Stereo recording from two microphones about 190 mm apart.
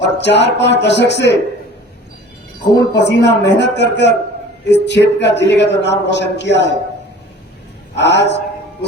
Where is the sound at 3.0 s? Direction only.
65° left (ahead or behind).